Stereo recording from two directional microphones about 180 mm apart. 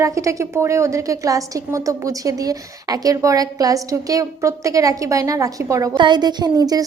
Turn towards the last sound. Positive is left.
turn(degrees=-20)  # may be behind; listen again after turning